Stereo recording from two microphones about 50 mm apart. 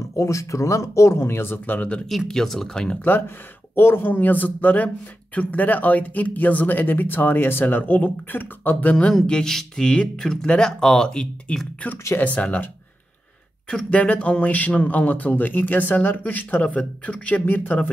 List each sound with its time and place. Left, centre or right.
0.1 s speech: left
2.0 s speech: centre
3.7 s speech: left
9.2 s speech: centre
12.2 s speech: left
13.7 s speech: left